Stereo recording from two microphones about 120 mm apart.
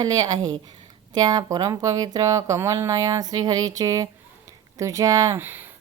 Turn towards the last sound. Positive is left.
turn(degrees=-15)  # may be behind; listen again after turning